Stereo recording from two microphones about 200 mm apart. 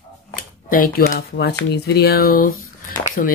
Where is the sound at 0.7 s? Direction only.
45° left (ahead or behind).